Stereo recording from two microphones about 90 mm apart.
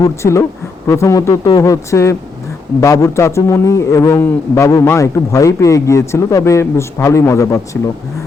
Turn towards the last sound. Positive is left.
turn(degrees=35)  # may be behind; listen again after turning